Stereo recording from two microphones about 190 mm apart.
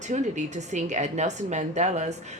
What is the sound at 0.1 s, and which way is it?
A woman's voice, 40° right (ahead or behind).